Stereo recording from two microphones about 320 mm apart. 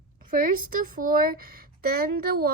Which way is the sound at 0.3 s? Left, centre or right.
Right.